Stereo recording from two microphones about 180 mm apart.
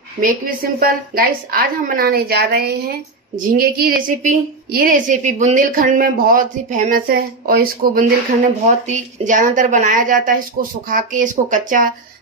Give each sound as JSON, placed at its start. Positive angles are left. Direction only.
{"t": 0.2, "sound": "a woman's voice", "side_deg": -50}
{"t": 8.8, "sound": "a woman's voice", "side_deg": -45}